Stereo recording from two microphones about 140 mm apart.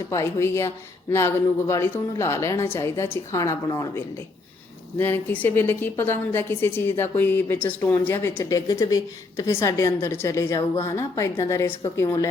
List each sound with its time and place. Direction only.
0.1 s a woman's voice: 20° left (ahead or behind)